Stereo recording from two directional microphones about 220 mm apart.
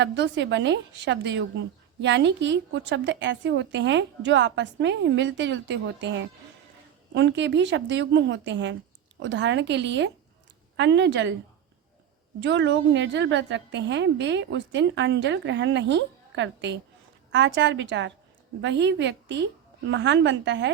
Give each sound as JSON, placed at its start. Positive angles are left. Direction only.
{"t": 0.0, "sound": "a woman's voice", "side_deg": -55}
{"t": 12.4, "sound": "a woman's voice", "side_deg": -55}